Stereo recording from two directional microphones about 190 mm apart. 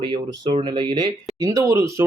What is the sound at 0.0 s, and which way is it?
Speech, 25° right (ahead or behind).